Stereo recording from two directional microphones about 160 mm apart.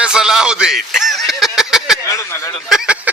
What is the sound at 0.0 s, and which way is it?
Speech, 5° right (ahead or behind).